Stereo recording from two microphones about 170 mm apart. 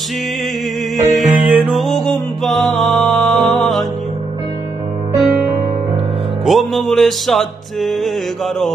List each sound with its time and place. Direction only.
0.9 s music: centre (ahead or behind)
6.4 s music: centre (ahead or behind)